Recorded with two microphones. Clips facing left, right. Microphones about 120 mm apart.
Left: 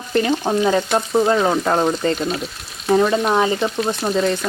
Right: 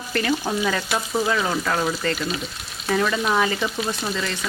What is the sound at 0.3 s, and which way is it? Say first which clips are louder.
Frying: left 3 dB; 25° left (ahead or behind).